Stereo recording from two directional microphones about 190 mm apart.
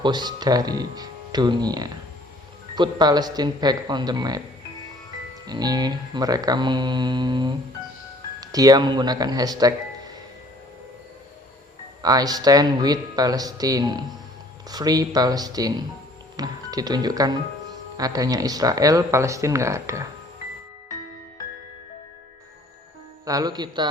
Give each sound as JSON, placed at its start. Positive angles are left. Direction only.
{"t": 0.0, "sound": "speech", "side_deg": -25}
{"t": 5.5, "sound": "speech", "side_deg": -20}
{"t": 12.0, "sound": "speech", "side_deg": -20}
{"t": 23.2, "sound": "speech", "side_deg": -20}